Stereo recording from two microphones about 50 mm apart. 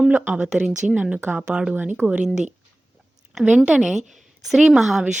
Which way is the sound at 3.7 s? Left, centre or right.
Centre.